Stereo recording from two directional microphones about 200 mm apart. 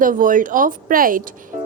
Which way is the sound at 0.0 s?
40° right (ahead or behind).